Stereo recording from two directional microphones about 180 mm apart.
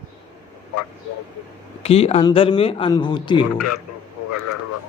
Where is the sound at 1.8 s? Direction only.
35° left (ahead or behind).